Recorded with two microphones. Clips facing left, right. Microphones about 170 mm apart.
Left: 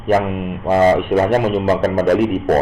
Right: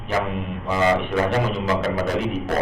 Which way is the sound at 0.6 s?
50° left (ahead or behind).